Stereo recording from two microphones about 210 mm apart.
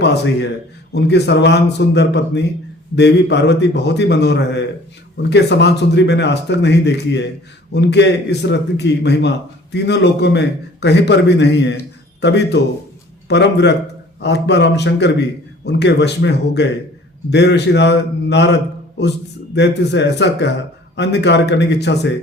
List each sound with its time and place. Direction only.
0.0 s a man's voice: 55° left (ahead or behind)
19.5 s speech: 55° left (ahead or behind)